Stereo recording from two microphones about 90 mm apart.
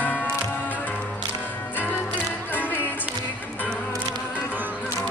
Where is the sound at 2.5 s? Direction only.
20° left (ahead or behind).